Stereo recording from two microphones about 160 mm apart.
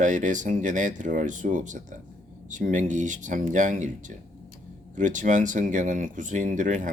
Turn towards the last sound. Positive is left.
turn(degrees=-50)  # may be behind; listen again after turning